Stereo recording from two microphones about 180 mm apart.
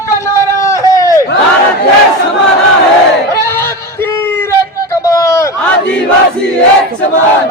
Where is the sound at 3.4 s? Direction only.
15° left (ahead or behind).